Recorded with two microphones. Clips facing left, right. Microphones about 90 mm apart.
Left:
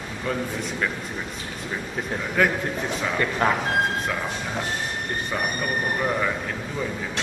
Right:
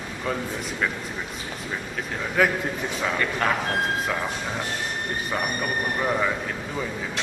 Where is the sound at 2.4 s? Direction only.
Centre (ahead or behind).